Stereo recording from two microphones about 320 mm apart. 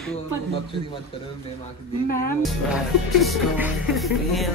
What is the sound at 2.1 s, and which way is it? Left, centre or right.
Speech, left.